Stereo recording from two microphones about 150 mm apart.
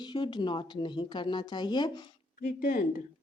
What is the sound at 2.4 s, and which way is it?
Speech, 65° left (ahead or behind).